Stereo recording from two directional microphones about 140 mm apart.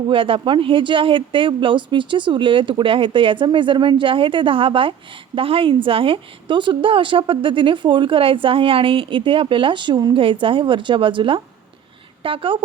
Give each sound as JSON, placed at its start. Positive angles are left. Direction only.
{"t": 0.1, "sound": "speech", "side_deg": -40}